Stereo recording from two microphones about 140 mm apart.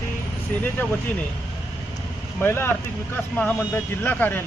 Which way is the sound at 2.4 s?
15° left (ahead or behind).